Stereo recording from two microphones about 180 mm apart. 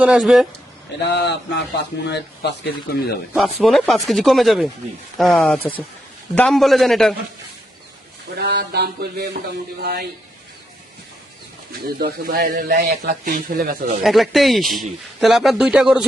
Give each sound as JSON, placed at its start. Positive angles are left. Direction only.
{"t": 0.0, "sound": "speech", "side_deg": -5}
{"t": 1.0, "sound": "speech", "side_deg": 75}
{"t": 3.3, "sound": "speech", "side_deg": 0}
{"t": 8.4, "sound": "a sound", "side_deg": -65}
{"t": 11.9, "sound": "a man's voice", "side_deg": -55}
{"t": 14.0, "sound": "speech", "side_deg": 0}